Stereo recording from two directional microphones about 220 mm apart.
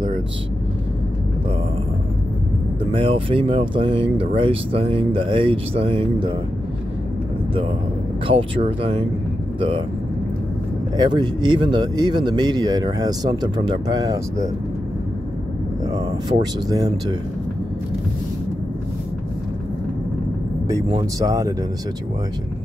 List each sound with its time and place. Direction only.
2.9 s speech: 25° right (ahead or behind)
8.3 s speech: 25° right (ahead or behind)
11.0 s speech: 20° right (ahead or behind)
16.6 s speech: 15° right (ahead or behind)
21.2 s speech: 15° right (ahead or behind)